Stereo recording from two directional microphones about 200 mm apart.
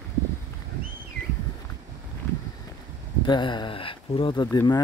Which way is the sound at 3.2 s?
20° left (ahead or behind).